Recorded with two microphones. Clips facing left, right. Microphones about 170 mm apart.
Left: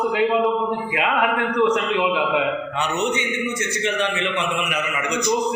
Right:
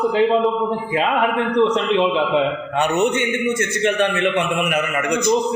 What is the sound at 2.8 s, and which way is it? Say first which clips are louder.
A man's voice: right 7 dB; 55° right (ahead or behind).